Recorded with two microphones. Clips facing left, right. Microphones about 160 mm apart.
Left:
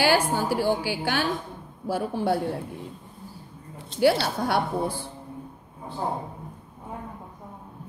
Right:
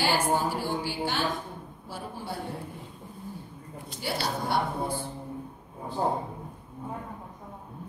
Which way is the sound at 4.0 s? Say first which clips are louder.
Left 10 dB; 85° left.